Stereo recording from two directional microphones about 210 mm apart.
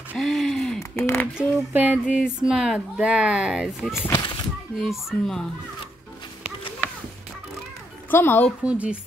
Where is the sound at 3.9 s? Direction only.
15° left (ahead or behind).